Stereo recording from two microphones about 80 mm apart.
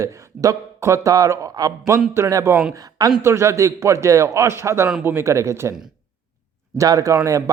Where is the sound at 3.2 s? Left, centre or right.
Right.